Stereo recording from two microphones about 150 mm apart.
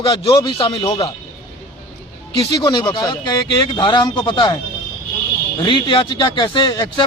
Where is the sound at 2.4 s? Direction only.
30° left (ahead or behind).